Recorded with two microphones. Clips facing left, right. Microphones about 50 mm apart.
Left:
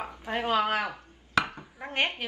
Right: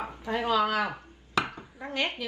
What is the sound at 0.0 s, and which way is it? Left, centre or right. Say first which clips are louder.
Speech: right 1 dB; left.